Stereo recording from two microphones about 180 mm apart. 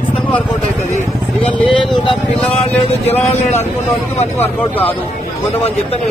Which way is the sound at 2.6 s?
35° left (ahead or behind).